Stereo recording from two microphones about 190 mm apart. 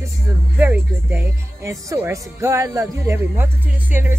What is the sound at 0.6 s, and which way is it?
Speech, 10° right (ahead or behind).